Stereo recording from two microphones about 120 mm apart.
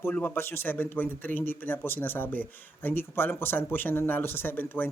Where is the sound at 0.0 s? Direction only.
15° left (ahead or behind).